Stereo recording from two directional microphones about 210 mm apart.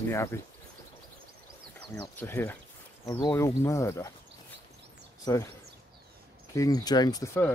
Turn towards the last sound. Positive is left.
turn(degrees=15)  # may be behind; listen again after turning